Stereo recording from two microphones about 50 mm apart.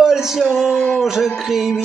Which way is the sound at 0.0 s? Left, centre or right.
Centre.